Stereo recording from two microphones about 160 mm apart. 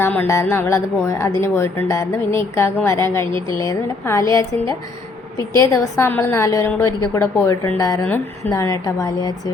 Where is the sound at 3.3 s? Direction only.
30° right (ahead or behind).